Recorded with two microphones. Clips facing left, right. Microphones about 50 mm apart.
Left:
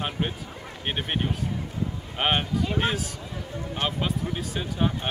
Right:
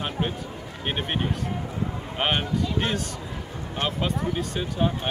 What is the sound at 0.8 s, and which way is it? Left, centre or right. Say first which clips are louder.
Speech: right 1 dB; centre.